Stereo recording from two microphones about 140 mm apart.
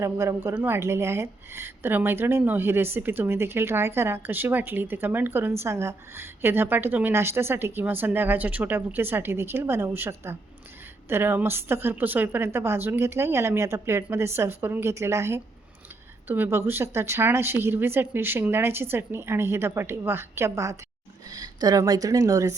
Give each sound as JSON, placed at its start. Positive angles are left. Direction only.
{"t": 0.0, "sound": "a woman's voice", "side_deg": -20}